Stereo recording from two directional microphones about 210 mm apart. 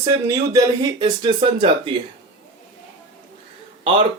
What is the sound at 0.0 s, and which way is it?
Speech, 15° right (ahead or behind).